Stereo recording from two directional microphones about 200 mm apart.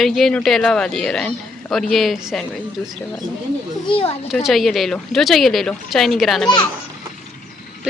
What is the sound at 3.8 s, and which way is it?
Speech, 30° left (ahead or behind).